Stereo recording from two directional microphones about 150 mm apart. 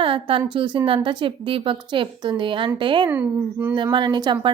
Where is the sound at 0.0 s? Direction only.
35° right (ahead or behind).